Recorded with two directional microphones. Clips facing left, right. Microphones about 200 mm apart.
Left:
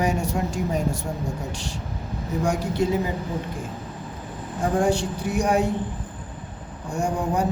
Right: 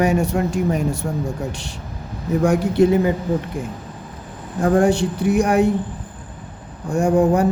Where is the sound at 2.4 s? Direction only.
60° right (ahead or behind).